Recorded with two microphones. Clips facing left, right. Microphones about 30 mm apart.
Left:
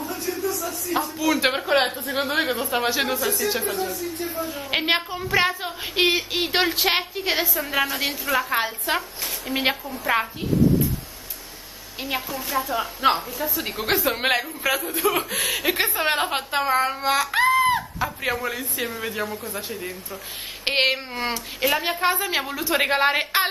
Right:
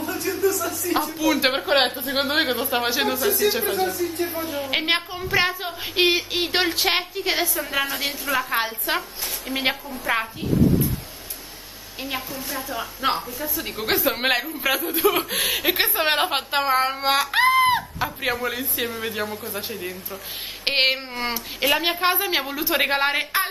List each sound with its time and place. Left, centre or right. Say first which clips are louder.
0.0 s music: right 4 dB; right
1.1 s speech: even; centre
2.2 s a woman's voice: right 1 dB; right
3.0 s speech: right 1 dB; centre
3.6 s a woman's voice: right 4 dB; right
4.6 s speech: left 1 dB; centre
12.0 s a woman's voice: left 2 dB; centre
13.8 s speech: right 1 dB; centre
15.8 s a woman's voice: right 2 dB; right
18.0 s speech: right 1 dB; centre
20.6 s speech: even; centre